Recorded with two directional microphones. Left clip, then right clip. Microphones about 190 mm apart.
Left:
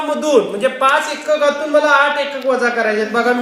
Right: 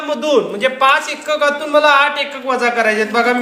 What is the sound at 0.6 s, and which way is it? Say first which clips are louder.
Speech: right 1 dB; 15° right (ahead or behind).